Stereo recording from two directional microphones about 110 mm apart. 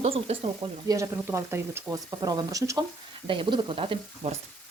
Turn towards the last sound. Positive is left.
turn(degrees=-90)